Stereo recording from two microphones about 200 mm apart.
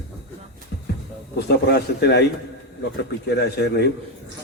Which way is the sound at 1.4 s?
55° left (ahead or behind).